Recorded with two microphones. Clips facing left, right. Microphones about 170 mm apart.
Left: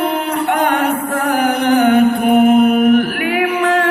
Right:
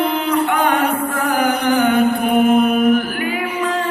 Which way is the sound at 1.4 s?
60° left (ahead or behind).